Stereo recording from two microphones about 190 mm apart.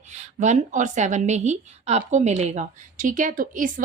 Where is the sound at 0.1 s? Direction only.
40° right (ahead or behind).